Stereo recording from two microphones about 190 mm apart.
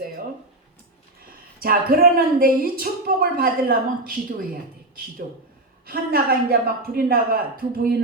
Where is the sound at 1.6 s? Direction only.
50° right (ahead or behind).